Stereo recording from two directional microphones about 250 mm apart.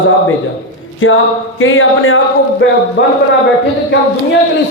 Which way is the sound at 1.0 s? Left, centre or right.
Left.